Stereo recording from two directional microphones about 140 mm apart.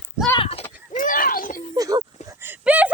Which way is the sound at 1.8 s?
25° right (ahead or behind).